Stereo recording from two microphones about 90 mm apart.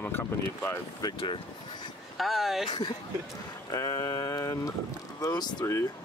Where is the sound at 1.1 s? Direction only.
70° left (ahead or behind).